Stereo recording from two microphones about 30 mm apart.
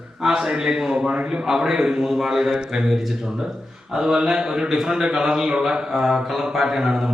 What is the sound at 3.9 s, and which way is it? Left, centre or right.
A man's voice, right.